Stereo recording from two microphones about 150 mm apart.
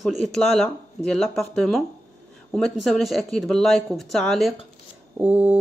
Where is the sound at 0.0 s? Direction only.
Centre (ahead or behind).